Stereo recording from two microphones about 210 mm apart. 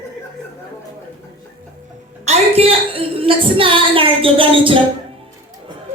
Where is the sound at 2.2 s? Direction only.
30° right (ahead or behind).